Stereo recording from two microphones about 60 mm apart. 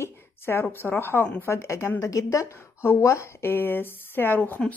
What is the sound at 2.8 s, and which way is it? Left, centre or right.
A woman's voice, left.